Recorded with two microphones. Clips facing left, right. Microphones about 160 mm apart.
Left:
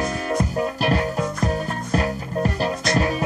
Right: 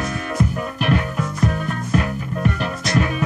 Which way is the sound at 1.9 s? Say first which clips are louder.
Even; 35° left (ahead or behind).